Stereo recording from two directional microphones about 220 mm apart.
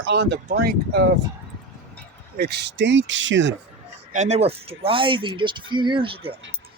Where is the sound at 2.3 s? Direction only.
50° right (ahead or behind).